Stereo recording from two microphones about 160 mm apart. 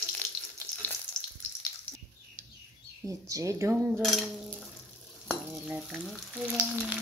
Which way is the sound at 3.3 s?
20° right (ahead or behind).